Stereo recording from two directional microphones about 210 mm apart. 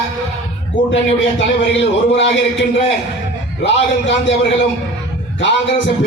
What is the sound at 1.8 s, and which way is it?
A man's voice, 60° left (ahead or behind).